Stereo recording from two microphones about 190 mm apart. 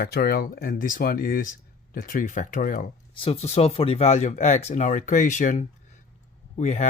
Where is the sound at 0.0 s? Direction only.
55° left (ahead or behind).